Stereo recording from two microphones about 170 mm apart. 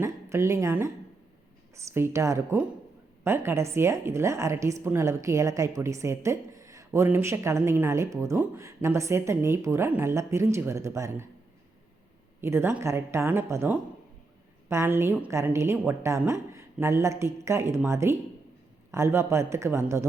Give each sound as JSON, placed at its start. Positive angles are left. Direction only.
{"t": 0.0, "sound": "a woman's voice", "side_deg": -15}
{"t": 12.4, "sound": "a woman's voice", "side_deg": -15}